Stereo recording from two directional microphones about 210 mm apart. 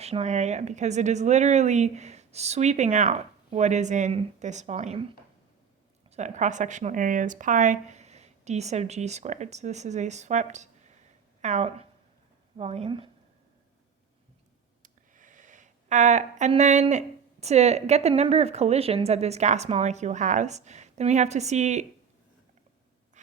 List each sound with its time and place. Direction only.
0.0 s speech: 30° right (ahead or behind)
6.1 s a woman's voice: 35° right (ahead or behind)
14.8 s speech: 40° right (ahead or behind)
23.2 s breathing: 35° right (ahead or behind)